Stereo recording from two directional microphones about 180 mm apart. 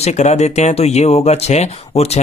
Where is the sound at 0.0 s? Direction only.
40° left (ahead or behind).